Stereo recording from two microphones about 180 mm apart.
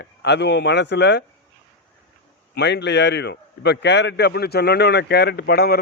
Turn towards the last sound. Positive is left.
turn(degrees=60)  # may be behind; listen again after turning